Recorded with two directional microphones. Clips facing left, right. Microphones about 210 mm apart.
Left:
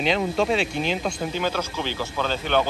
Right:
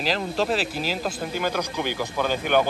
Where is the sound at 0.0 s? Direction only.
Centre (ahead or behind).